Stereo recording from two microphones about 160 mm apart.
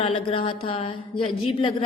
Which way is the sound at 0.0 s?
35° left (ahead or behind).